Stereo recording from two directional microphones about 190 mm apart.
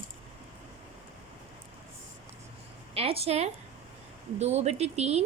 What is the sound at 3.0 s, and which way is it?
A woman's voice, 30° right (ahead or behind).